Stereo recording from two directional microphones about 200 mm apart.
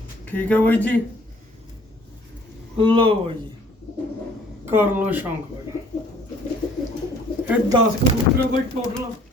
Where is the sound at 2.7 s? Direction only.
25° right (ahead or behind).